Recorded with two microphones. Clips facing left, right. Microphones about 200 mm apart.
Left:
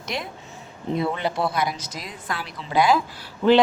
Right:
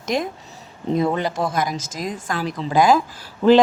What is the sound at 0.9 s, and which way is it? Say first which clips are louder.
A woman's voice: right 4 dB; 40° right (ahead or behind).